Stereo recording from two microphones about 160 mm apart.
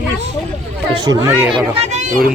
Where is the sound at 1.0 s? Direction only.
20° right (ahead or behind).